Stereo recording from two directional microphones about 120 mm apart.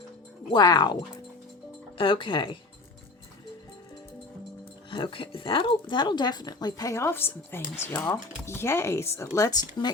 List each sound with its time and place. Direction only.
0.5 s speech: 35° left (ahead or behind)
2.0 s speech: 45° left (ahead or behind)
4.9 s speech: 45° left (ahead or behind)